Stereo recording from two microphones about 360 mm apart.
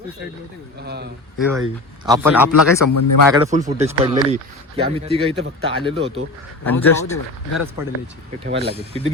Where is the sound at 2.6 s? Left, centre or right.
Left.